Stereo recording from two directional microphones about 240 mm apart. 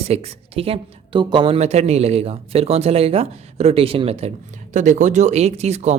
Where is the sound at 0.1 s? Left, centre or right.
Right.